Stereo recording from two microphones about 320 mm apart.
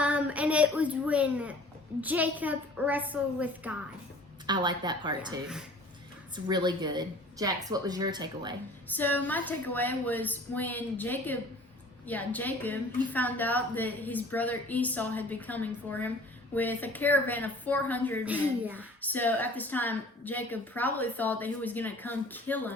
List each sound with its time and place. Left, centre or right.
0.0 s a woman's voice: centre
8.9 s a woman's voice: centre
19.0 s a woman's voice: centre